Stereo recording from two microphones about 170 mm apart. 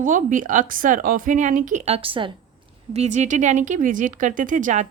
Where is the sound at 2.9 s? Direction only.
40° right (ahead or behind).